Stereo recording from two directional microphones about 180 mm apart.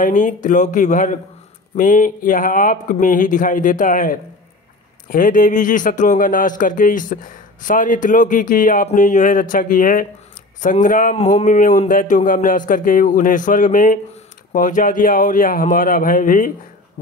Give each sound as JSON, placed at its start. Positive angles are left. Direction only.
{"t": 0.0, "sound": "speech", "side_deg": 45}